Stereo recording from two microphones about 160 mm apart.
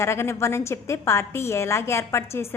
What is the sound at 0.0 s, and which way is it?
A woman's voice, 15° left (ahead or behind).